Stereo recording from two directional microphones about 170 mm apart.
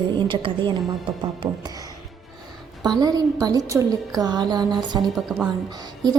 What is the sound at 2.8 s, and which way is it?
A woman's voice, 25° right (ahead or behind).